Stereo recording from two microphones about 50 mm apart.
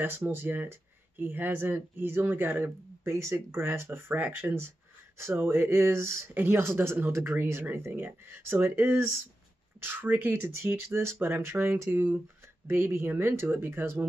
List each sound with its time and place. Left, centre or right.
0.0 s speech: right
6.3 s speech: right
8.7 s speech: right